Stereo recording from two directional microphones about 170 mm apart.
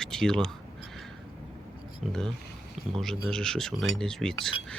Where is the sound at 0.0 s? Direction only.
5° left (ahead or behind).